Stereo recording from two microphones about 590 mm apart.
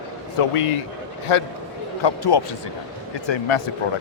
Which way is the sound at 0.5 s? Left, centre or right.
Left.